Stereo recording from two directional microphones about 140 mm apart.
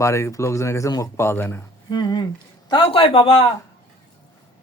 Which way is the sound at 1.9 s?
30° left (ahead or behind).